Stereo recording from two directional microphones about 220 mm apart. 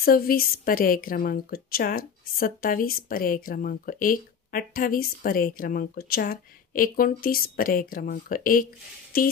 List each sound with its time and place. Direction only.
0.0 s a woman's voice: 40° left (ahead or behind)